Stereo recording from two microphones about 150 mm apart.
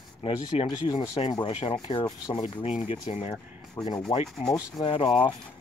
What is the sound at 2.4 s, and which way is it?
Speech, 45° left (ahead or behind).